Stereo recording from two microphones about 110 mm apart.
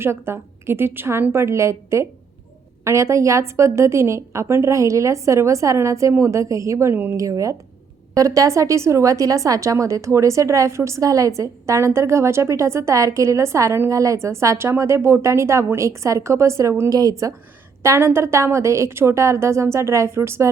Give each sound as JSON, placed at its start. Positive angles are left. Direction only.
{"t": 0.0, "sound": "a woman's voice", "side_deg": -20}
{"t": 7.2, "sound": "a woman's voice", "side_deg": -30}